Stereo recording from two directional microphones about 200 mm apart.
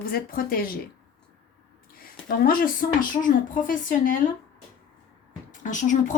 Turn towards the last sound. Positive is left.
turn(degrees=40)  # may be behind; listen again after turning